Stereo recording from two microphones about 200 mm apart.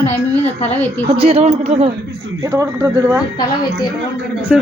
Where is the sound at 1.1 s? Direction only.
30° right (ahead or behind).